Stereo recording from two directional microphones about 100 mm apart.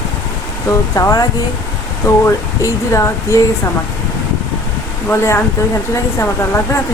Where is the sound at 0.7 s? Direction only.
35° left (ahead or behind).